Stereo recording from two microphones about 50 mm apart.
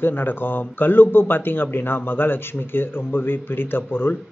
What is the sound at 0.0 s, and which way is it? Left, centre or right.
A man's voice, left.